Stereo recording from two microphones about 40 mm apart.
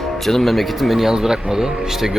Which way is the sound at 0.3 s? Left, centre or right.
Centre.